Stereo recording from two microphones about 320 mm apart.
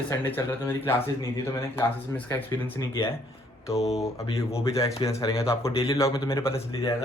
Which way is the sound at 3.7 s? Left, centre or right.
Centre.